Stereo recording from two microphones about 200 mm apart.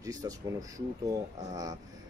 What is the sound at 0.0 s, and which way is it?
Speech, 15° right (ahead or behind).